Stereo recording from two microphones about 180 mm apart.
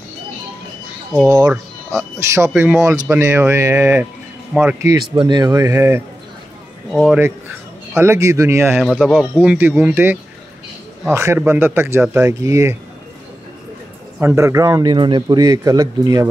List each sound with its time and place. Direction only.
1.2 s speech: 20° right (ahead or behind)
4.5 s speech: 5° right (ahead or behind)
5.1 s speech: 25° right (ahead or behind)
6.9 s speech: centre (ahead or behind)
7.9 s speech: 15° right (ahead or behind)
8.7 s speech: centre (ahead or behind)
9.4 s speech: 10° right (ahead or behind)
14.2 s speech: 15° right (ahead or behind)